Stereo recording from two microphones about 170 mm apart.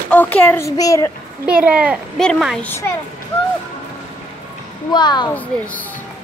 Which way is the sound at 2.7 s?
15° left (ahead or behind).